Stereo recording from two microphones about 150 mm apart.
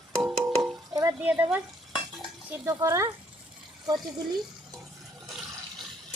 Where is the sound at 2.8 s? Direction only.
20° right (ahead or behind).